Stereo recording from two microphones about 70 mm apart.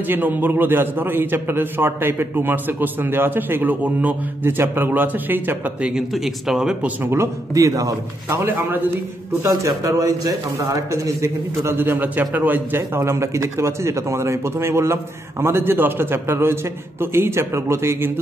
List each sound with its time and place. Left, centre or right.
0.1 s a man's voice: right
4.5 s a man's voice: right
5.8 s speech: centre
6.1 s speech: centre
7.0 s a man's voice: right
7.5 s a man's voice: right
8.3 s a man's voice: right
9.5 s a man's voice: right
11.2 s a man's voice: right